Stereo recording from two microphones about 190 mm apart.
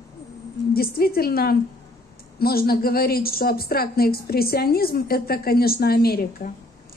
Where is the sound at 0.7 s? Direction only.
55° left (ahead or behind).